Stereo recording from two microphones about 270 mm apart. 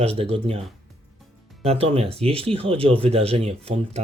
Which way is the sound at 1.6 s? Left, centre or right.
Right.